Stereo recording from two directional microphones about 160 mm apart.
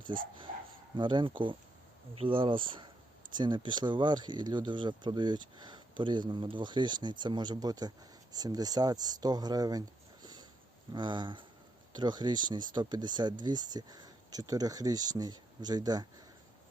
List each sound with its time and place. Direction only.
0.1 s speech: 30° right (ahead or behind)
10.9 s speech: 30° right (ahead or behind)